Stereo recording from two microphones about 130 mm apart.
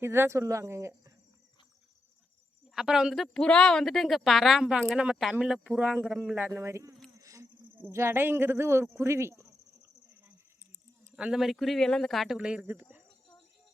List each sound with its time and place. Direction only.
0.0 s speech: 20° right (ahead or behind)
2.7 s a woman's voice: 5° right (ahead or behind); by 6.9 s 20° right (ahead or behind)
7.2 s a sound: 25° right (ahead or behind)
7.8 s speech: 20° right (ahead or behind)
11.2 s a woman's voice: 5° right (ahead or behind)